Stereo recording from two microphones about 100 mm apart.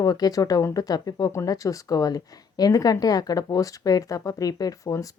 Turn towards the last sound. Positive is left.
turn(degrees=35)  # may be behind; listen again after turning